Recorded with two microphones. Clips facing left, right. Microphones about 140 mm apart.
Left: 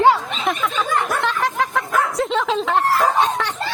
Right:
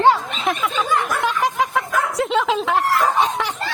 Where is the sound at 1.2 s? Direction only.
10° right (ahead or behind).